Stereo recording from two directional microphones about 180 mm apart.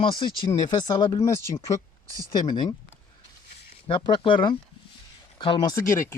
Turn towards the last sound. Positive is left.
turn(degrees=15)  # may be behind; listen again after turning